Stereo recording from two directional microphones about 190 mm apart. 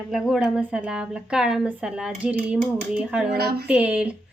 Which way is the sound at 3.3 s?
60° right (ahead or behind).